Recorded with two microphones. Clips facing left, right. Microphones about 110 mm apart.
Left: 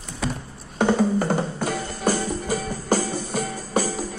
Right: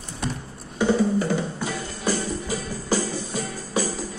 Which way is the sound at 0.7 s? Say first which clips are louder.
Left 1 dB; 50° left (ahead or behind).